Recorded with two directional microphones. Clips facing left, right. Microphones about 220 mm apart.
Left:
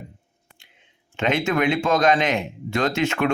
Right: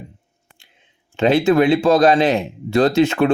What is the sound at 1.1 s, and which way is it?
Speech, 35° right (ahead or behind).